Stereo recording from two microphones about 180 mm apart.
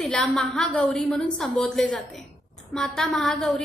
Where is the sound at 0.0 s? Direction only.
5° left (ahead or behind).